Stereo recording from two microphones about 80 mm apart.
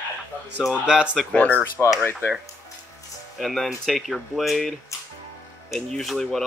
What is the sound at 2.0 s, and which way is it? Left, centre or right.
Speech, left.